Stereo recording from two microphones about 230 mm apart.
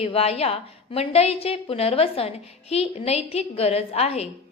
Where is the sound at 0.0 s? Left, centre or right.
Left.